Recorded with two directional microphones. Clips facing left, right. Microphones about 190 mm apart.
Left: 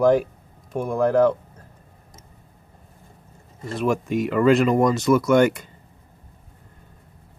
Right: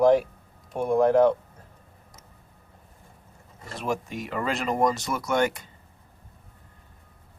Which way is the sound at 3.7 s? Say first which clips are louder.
Left 8 dB; 55° left (ahead or behind).